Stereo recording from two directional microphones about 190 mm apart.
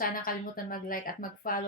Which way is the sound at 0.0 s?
45° left (ahead or behind).